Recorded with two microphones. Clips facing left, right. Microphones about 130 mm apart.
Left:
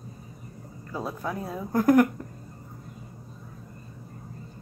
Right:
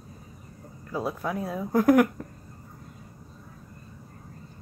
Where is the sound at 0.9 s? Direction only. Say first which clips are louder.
Right 2 dB; 5° right (ahead or behind).